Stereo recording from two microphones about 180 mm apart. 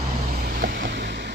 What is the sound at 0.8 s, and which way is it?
Music, 70° right (ahead or behind).